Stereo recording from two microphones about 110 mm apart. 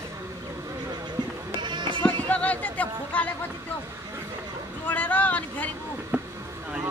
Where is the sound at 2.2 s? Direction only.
10° left (ahead or behind).